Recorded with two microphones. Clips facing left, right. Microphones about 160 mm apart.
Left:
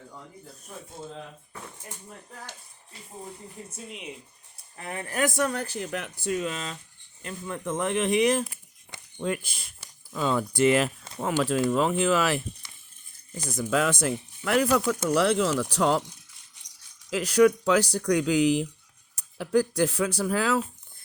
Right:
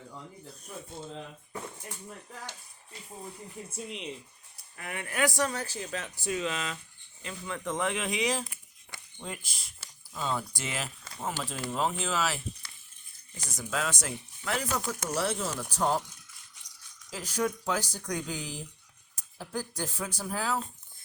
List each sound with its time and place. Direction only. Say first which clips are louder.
3.7 s speech: right 2 dB; centre (ahead or behind)
4.5 s speech: left 4 dB; 30° left (ahead or behind); by 9.7 s 60° left (ahead or behind)
10.1 s speech: left 7 dB; 75° left (ahead or behind); by 12.4 s 60° left (ahead or behind)
13.5 s speech: left 8 dB; 60° left (ahead or behind); by 16.0 s 85° left
17.1 s speech: left 12 dB; 75° left (ahead or behind)